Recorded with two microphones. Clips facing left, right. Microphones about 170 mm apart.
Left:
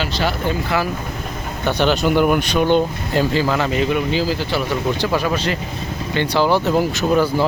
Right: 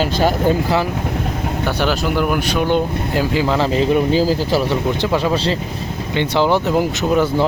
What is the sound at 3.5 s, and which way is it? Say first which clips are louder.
Speech: right 3 dB; 30° right (ahead or behind).